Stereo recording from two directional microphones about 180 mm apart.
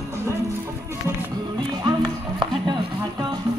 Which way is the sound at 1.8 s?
25° right (ahead or behind).